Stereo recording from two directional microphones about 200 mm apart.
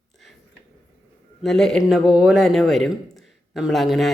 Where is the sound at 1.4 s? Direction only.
Centre (ahead or behind).